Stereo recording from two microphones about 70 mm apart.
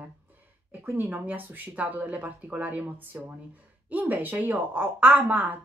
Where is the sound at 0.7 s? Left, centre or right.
Right.